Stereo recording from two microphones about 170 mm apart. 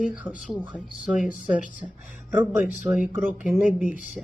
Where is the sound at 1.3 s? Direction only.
50° left (ahead or behind).